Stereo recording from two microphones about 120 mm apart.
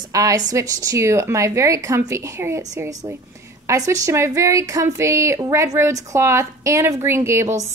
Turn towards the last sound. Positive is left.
turn(degrees=-25)  # may be behind; listen again after turning